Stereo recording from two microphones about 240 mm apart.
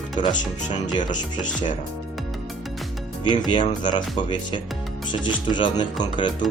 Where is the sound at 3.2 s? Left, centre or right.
Centre.